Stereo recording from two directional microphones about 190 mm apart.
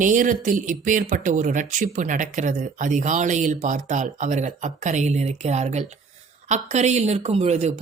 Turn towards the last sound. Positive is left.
turn(degrees=-35)  # may be behind; listen again after turning